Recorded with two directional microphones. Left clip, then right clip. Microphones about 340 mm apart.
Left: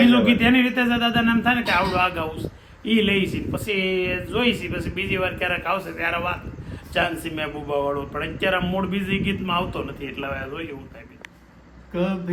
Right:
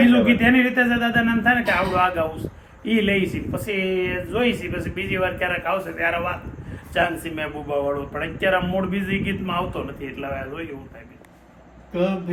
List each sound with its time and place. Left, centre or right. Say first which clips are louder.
0.0 s speech: right 1 dB; centre